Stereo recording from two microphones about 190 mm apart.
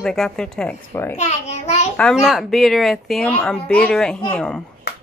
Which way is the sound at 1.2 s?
35° left (ahead or behind).